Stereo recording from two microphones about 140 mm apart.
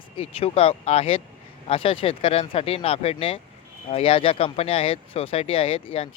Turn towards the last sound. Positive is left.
turn(degrees=45)  # may be behind; listen again after turning